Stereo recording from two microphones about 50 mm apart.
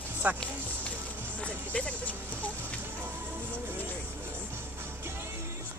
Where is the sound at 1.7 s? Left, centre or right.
Left.